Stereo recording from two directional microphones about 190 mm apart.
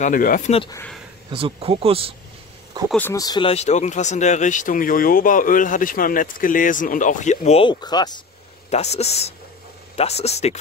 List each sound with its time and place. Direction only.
0.0 s speech: 45° left (ahead or behind)
1.3 s speech: 30° right (ahead or behind)
2.9 s speech: 10° left (ahead or behind)
8.6 s speech: 35° left (ahead or behind)